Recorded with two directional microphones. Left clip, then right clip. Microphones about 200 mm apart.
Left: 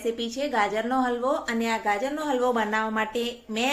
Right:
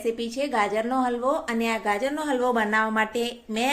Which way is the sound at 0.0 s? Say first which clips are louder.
Right 1 dB; 10° right (ahead or behind).